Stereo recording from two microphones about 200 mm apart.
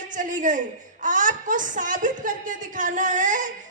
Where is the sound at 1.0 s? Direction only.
40° right (ahead or behind).